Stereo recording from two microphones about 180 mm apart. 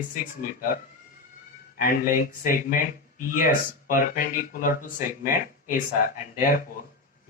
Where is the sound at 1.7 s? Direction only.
50° left (ahead or behind).